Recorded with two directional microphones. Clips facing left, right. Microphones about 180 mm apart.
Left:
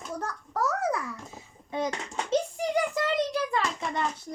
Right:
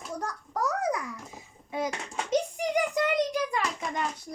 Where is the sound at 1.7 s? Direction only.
5° right (ahead or behind).